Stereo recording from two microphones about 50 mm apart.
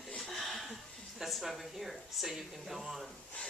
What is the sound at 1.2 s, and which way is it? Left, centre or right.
Speech, centre.